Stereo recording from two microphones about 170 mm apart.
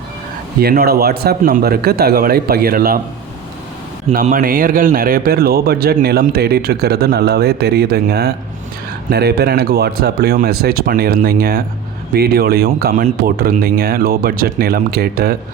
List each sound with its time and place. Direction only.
0.6 s a man's voice: 65° right (ahead or behind)
4.1 s a man's voice: 55° right (ahead or behind)